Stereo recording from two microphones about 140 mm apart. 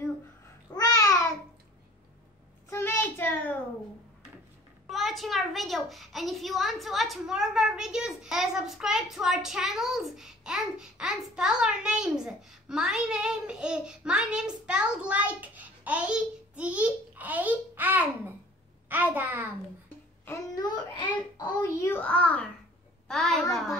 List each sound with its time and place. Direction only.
0.7 s babbling: 25° left (ahead or behind)
2.7 s a sound: 15° left (ahead or behind)
4.8 s a child's voice: centre (ahead or behind)
20.5 s a child's voice: 30° left (ahead or behind)
21.5 s a child's voice: 20° left (ahead or behind); by 23.4 s 5° left (ahead or behind)